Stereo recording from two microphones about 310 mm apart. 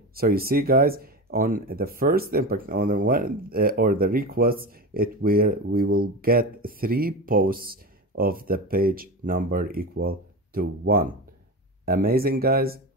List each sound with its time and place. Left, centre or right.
0.1 s speech: right